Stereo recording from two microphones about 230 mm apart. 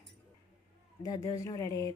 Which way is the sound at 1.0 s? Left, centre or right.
Centre.